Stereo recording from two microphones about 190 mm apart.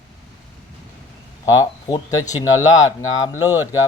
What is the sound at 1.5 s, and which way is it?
Speech, 20° left (ahead or behind).